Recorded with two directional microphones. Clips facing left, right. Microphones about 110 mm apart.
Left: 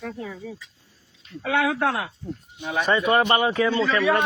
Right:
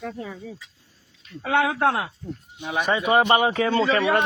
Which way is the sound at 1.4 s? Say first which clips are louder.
Right 1 dB; 30° right (ahead or behind).